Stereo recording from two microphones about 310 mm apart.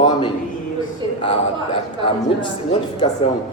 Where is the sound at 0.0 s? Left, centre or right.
Centre.